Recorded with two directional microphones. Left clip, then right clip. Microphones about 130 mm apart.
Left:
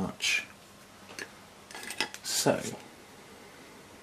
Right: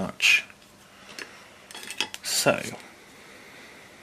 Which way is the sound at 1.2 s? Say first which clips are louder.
Right 2 dB; 5° right (ahead or behind).